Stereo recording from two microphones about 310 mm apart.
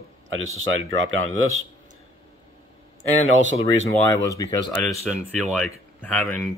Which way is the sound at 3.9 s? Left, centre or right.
Centre.